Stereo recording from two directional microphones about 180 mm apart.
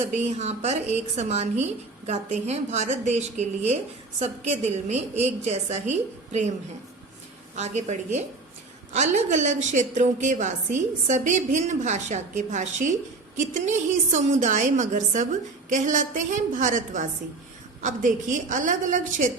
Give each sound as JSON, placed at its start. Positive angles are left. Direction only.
{"t": 0.1, "sound": "a woman's voice", "side_deg": -40}
{"t": 7.5, "sound": "a woman's voice", "side_deg": -40}